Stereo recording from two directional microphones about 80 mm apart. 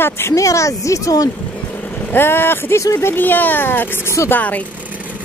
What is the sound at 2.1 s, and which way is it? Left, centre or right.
Speech, left.